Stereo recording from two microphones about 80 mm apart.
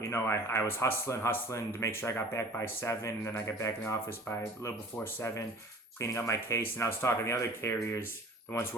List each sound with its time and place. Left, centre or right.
0.0 s a man's voice: left
6.0 s a man's voice: left